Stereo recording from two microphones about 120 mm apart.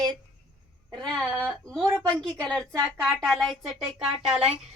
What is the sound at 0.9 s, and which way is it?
A woman's voice, 5° left (ahead or behind).